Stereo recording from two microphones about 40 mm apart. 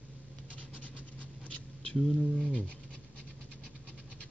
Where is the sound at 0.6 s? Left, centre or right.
Left.